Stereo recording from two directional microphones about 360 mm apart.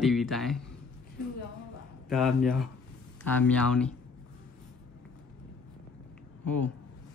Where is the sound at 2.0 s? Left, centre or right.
Centre.